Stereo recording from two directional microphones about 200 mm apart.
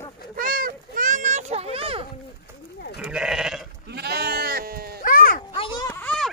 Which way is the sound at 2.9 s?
5° right (ahead or behind).